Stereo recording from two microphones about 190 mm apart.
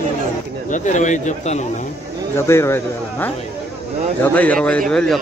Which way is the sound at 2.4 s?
15° left (ahead or behind).